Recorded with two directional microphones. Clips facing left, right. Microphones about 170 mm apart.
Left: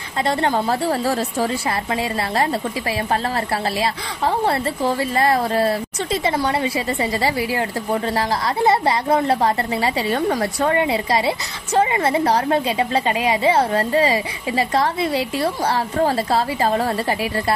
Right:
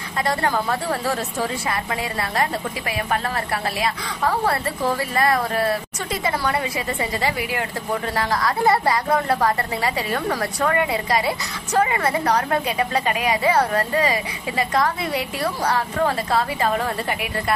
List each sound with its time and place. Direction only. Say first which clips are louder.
0.3 s a woman's voice: left 3 dB; 25° left (ahead or behind)
3.8 s a woman's voice: left 1 dB; 30° left (ahead or behind)